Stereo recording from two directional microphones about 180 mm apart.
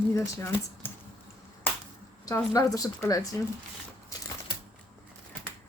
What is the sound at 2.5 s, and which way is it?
Speech, 20° left (ahead or behind).